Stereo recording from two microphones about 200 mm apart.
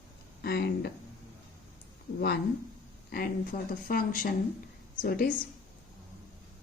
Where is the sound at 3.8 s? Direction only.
45° left (ahead or behind).